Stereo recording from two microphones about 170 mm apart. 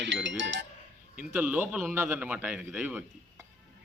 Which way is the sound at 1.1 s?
10° right (ahead or behind).